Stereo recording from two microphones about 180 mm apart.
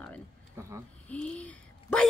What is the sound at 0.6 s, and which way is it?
Speech, 15° right (ahead or behind).